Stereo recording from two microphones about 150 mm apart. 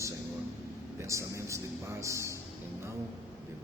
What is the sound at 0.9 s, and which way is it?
A man's voice, 20° right (ahead or behind).